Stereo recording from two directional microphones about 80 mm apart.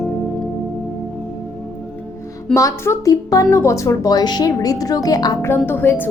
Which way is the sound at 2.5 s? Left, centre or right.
Left.